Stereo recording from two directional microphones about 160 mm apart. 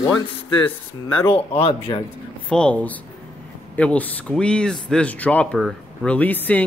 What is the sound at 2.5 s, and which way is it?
Speech, 5° left (ahead or behind).